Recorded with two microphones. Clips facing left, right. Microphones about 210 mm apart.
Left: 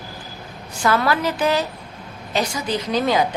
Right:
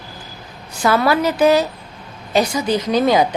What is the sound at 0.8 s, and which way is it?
Speech, 10° right (ahead or behind).